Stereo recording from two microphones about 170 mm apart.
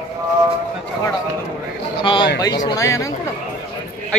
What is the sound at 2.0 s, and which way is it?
Speech, 30° left (ahead or behind).